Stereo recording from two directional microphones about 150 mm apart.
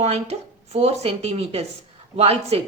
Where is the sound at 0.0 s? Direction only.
45° right (ahead or behind).